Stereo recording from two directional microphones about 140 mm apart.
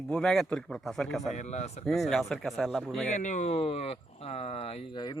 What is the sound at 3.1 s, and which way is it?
Speech, 60° left (ahead or behind).